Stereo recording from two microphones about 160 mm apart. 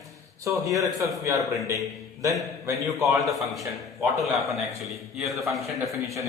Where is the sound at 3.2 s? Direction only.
Centre (ahead or behind).